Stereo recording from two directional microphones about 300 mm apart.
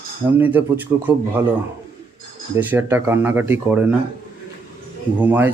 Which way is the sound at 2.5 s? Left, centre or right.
Centre.